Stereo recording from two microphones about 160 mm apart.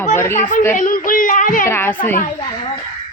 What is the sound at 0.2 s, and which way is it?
Speech, 15° left (ahead or behind).